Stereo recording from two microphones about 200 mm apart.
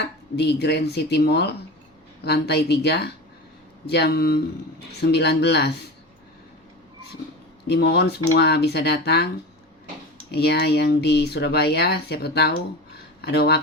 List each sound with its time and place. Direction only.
0.0 s speech: 55° left (ahead or behind)
7.7 s speech: 55° left (ahead or behind)
10.3 s speech: 55° left (ahead or behind)